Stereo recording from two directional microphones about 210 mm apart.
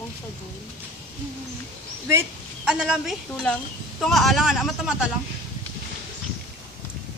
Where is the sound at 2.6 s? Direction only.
5° right (ahead or behind).